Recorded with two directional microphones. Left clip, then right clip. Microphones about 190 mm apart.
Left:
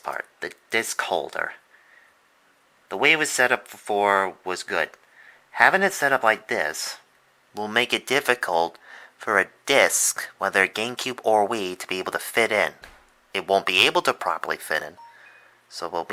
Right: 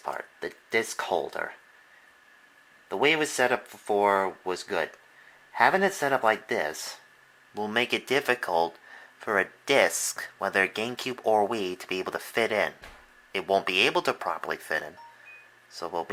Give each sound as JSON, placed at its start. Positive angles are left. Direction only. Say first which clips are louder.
{"t": 0.0, "sound": "speech", "louder": "left 3 dB", "side_deg": 15}
{"t": 2.9, "sound": "speech", "louder": "left 4 dB", "side_deg": 15}